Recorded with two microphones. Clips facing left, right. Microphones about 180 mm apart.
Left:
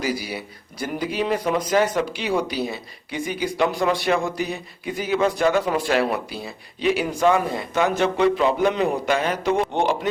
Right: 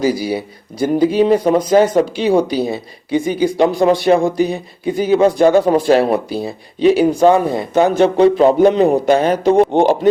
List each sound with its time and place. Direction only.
0.0 s speech: 30° right (ahead or behind)